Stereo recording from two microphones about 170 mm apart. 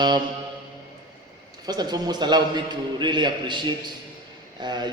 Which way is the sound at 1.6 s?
25° right (ahead or behind).